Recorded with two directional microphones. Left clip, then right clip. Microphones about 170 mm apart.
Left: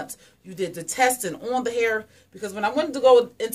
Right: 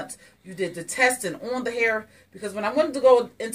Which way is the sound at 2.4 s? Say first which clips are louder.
Right 1 dB; 20° left (ahead or behind).